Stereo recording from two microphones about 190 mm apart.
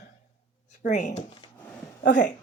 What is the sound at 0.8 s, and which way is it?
Speech, 40° left (ahead or behind).